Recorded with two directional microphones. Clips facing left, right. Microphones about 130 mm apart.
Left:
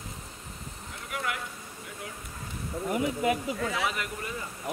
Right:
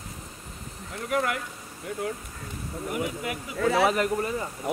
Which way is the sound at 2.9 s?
30° left (ahead or behind).